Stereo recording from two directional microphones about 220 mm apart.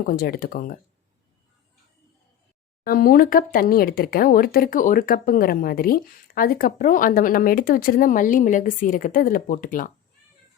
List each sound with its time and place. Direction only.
0.0 s speech: 40° left (ahead or behind)
2.8 s speech: 40° left (ahead or behind)